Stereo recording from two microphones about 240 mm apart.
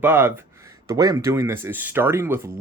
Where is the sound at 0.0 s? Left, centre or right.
Centre.